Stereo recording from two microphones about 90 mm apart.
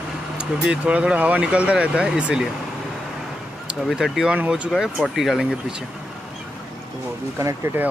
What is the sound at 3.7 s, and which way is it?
Speech, 5° right (ahead or behind).